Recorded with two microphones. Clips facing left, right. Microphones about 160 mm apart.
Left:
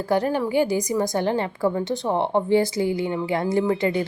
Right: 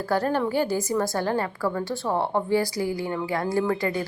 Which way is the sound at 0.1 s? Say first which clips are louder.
Left 2 dB; 15° left (ahead or behind).